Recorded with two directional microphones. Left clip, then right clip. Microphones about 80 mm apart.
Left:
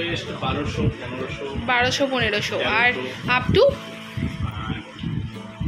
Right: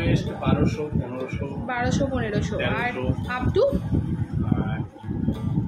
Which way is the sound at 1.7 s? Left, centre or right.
Centre.